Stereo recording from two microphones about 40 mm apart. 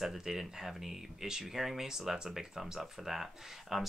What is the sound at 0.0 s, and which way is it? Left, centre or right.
Speech, centre.